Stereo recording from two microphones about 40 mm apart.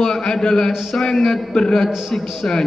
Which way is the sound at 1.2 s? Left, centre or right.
Centre.